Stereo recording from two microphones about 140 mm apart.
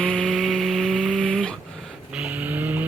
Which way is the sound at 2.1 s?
10° right (ahead or behind).